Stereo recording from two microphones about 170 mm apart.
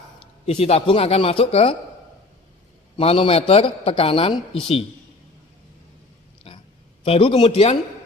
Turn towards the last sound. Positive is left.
turn(degrees=35)  # may be behind; listen again after turning